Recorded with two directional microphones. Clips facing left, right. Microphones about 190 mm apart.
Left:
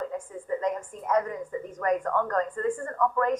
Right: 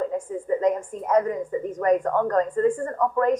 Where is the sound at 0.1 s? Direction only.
25° right (ahead or behind).